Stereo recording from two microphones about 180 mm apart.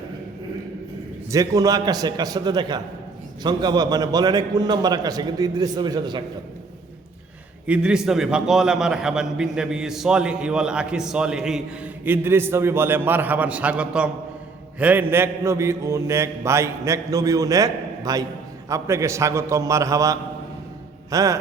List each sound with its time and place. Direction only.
1.3 s a man's voice: 20° right (ahead or behind)
7.7 s a man's voice: 5° right (ahead or behind)